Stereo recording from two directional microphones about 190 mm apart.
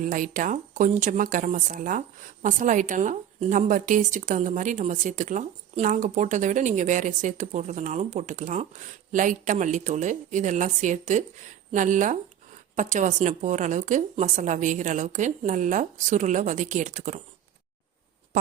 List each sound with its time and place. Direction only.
0.0 s speech: 45° right (ahead or behind)